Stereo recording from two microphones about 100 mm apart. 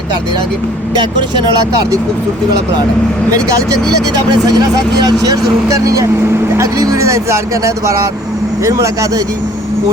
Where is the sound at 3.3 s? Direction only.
35° right (ahead or behind).